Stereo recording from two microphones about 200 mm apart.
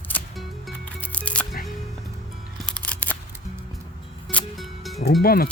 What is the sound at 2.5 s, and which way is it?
Music, 5° left (ahead or behind).